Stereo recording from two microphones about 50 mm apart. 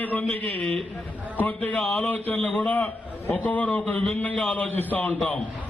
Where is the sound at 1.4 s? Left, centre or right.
Left.